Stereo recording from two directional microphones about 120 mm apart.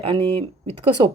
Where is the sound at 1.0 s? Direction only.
30° right (ahead or behind).